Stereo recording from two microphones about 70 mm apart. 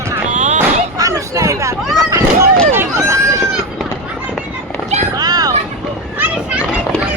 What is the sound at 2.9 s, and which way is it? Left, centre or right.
Run, right.